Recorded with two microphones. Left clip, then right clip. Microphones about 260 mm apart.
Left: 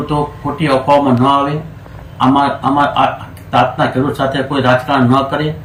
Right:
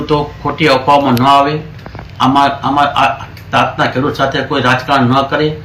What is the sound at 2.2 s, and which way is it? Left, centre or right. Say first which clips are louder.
Speech: right 2 dB; centre.